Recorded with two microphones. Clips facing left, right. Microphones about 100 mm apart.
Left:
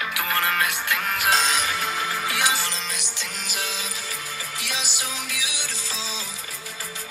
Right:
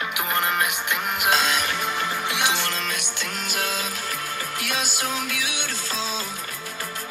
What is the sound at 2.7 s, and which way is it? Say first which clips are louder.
Music: right 4 dB; 55° right (ahead or behind).